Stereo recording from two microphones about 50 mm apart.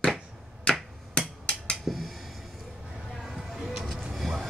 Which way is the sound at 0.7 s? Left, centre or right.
Centre.